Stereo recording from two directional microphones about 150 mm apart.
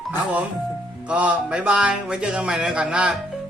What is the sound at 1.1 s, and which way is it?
Speech, 5° right (ahead or behind).